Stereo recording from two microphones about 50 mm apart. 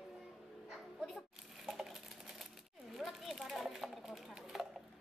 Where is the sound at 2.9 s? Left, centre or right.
Centre.